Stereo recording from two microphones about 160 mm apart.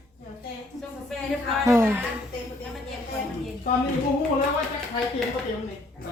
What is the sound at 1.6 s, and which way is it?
Speech, 15° right (ahead or behind).